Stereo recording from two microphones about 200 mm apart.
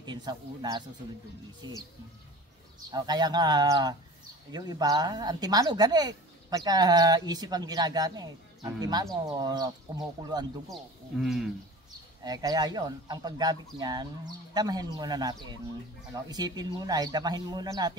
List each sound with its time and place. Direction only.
0.0 s speech: 20° right (ahead or behind)
2.9 s speech: 20° right (ahead or behind)
10.7 s speech: centre (ahead or behind)
12.2 s speech: 20° right (ahead or behind)